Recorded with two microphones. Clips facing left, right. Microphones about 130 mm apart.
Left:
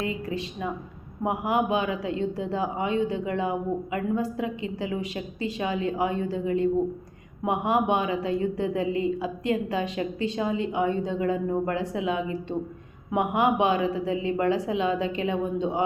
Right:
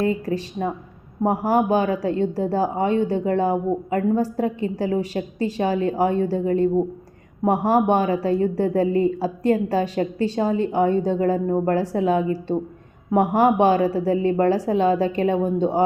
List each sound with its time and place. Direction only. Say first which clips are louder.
0.0 s a woman's voice: right 7 dB; 40° right (ahead or behind)